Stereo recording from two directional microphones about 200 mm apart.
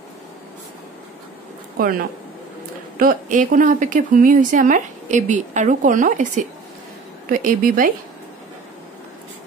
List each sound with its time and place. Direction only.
1.8 s a woman's voice: 45° right (ahead or behind)